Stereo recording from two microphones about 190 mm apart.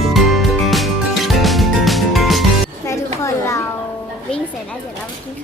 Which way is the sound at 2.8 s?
15° left (ahead or behind).